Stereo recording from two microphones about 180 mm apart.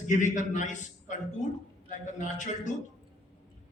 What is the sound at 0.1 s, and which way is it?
A man's voice, 45° left (ahead or behind).